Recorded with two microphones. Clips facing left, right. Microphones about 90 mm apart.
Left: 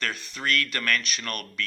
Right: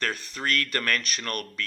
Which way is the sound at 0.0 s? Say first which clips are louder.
Right 1 dB; 40° right (ahead or behind).